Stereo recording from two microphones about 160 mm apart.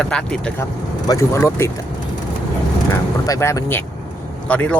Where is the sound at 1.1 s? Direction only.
20° left (ahead or behind).